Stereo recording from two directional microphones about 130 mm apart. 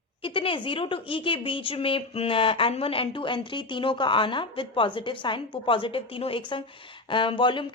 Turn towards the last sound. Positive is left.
turn(degrees=40)  # may be behind; listen again after turning